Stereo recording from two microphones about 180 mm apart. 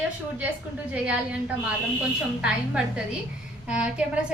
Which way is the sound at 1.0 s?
5° right (ahead or behind).